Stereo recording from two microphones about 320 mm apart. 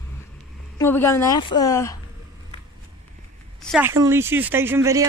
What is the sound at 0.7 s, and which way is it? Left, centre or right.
A woman's voice, centre.